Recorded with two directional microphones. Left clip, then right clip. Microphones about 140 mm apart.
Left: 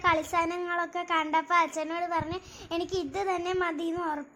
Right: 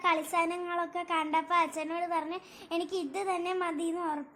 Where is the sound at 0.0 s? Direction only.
Centre (ahead or behind).